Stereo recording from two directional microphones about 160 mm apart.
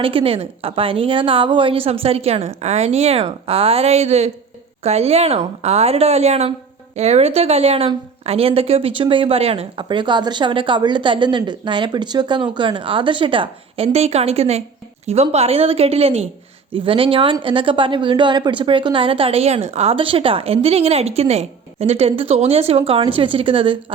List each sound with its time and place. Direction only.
0.0 s speech: 35° right (ahead or behind)